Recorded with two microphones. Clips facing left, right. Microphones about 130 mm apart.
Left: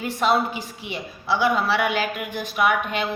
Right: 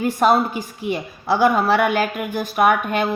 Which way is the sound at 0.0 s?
45° right (ahead or behind).